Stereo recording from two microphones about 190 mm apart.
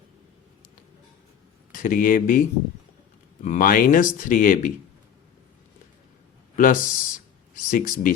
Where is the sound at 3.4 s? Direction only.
45° left (ahead or behind).